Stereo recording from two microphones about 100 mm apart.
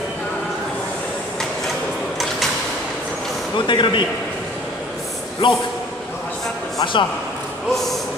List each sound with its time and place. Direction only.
3.5 s a man's voice: 55° left (ahead or behind)
5.4 s a man's voice: 50° left (ahead or behind)
6.8 s speech: 50° left (ahead or behind)